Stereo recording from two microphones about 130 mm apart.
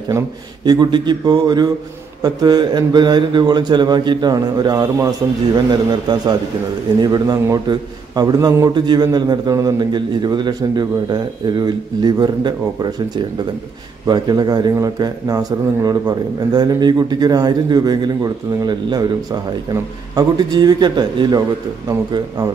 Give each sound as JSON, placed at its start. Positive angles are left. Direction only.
{"t": 0.7, "sound": "a man's voice", "side_deg": -35}
{"t": 14.0, "sound": "a man's voice", "side_deg": -35}